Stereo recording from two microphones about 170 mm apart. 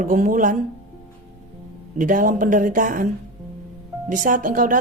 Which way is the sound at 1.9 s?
50° right (ahead or behind).